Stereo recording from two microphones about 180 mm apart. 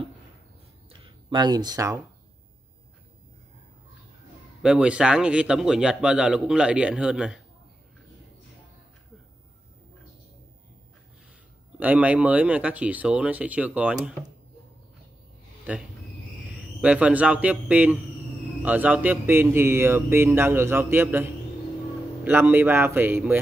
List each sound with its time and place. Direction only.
0.8 s a sound: 25° right (ahead or behind)
4.6 s a man's voice: 5° right (ahead or behind)
11.8 s speech: 10° right (ahead or behind)
16.5 s a man's voice: 5° right (ahead or behind)